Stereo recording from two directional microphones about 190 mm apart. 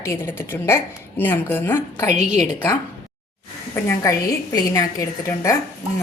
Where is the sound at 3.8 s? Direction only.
15° left (ahead or behind).